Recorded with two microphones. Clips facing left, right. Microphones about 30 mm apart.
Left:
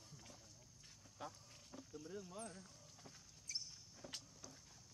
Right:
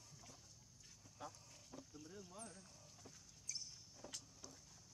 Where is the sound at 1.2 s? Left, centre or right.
Left.